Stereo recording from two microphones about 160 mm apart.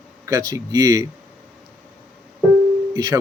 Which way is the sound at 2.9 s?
25° right (ahead or behind).